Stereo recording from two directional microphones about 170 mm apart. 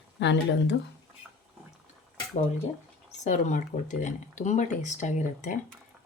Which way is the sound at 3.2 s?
45° left (ahead or behind).